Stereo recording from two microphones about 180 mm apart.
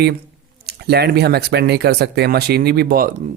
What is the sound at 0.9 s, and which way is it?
Speech, 65° right (ahead or behind).